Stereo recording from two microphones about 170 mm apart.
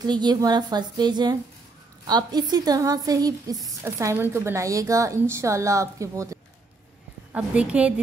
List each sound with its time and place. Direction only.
0.0 s a woman's voice: 25° right (ahead or behind)
7.3 s speech: 5° right (ahead or behind)